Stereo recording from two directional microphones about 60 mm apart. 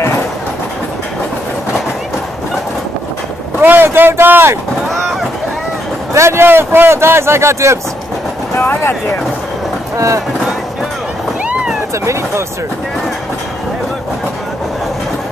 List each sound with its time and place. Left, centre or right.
3.6 s speech: right
6.1 s speech: right
8.5 s vehicle: left
9.9 s speech: right